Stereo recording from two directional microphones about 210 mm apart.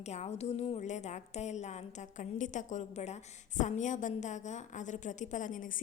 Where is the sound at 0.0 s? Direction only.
30° left (ahead or behind).